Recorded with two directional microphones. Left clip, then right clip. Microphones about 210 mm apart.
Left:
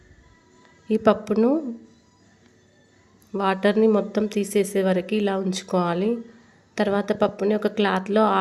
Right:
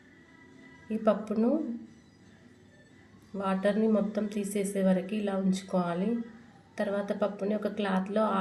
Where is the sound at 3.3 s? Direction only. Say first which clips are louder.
Left 8 dB; 45° left (ahead or behind).